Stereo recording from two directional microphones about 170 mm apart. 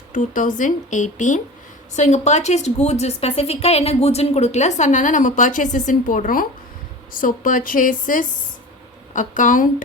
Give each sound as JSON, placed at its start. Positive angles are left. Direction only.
{"t": 0.1, "sound": "a woman's voice", "side_deg": 50}